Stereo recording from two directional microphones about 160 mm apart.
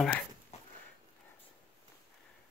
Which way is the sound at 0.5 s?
40° left (ahead or behind).